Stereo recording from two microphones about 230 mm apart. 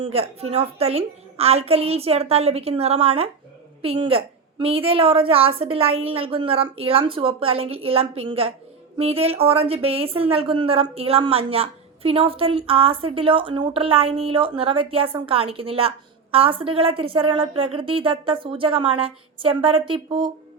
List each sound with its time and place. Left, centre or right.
0.0 s a woman's voice: right